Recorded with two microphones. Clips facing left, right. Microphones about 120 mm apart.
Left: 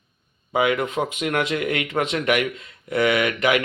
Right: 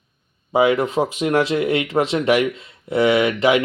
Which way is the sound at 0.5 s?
30° right (ahead or behind).